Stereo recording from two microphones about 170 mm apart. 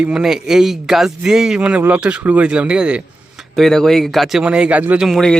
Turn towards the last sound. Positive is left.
turn(degrees=0)  # may be behind; listen again after turning